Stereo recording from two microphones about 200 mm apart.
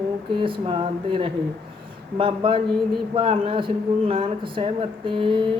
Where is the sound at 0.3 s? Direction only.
25° right (ahead or behind).